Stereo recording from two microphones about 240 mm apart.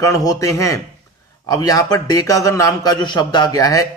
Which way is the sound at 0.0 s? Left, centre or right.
Centre.